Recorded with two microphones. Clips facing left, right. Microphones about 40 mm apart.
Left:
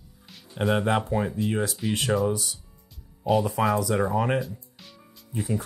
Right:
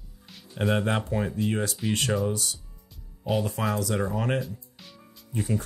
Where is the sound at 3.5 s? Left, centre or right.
Centre.